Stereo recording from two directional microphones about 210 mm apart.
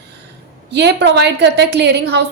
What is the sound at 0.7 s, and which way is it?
A woman's voice, 55° right (ahead or behind).